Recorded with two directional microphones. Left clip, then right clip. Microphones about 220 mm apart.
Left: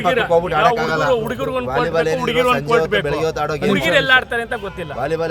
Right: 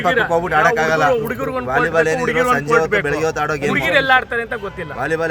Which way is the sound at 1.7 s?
20° right (ahead or behind).